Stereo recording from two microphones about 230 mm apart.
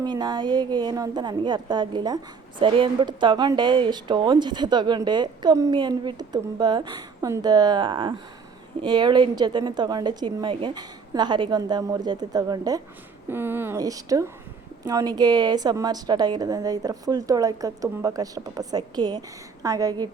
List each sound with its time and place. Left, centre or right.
0.0 s a woman's voice: centre